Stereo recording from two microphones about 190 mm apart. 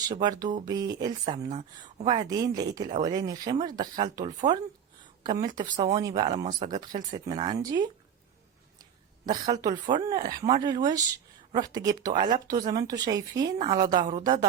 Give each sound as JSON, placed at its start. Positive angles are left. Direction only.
{"t": 0.1, "sound": "a woman's voice", "side_deg": -20}
{"t": 6.2, "sound": "speech", "side_deg": -40}
{"t": 6.7, "sound": "a woman's voice", "side_deg": -20}